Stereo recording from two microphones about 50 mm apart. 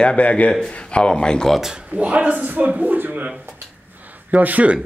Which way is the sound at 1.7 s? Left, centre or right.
Centre.